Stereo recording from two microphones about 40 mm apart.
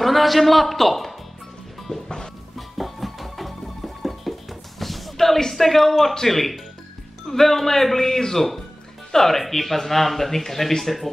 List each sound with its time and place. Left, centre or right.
0.0 s a man's voice: centre
1.9 s music: centre
2.8 s music: centre
7.2 s speech: centre